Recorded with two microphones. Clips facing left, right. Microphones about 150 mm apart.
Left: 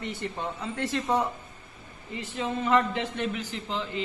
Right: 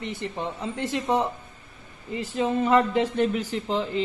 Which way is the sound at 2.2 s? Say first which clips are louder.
Right 6 dB; 35° right (ahead or behind).